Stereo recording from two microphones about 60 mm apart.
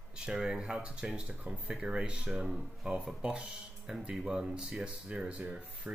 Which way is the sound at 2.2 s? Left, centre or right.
Centre.